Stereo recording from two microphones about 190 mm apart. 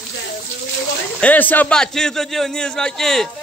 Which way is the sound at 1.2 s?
10° left (ahead or behind).